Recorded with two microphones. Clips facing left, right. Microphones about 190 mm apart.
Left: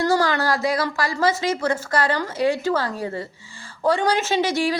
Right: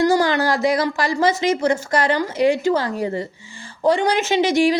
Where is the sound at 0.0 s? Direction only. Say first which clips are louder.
Right 3 dB; 15° right (ahead or behind).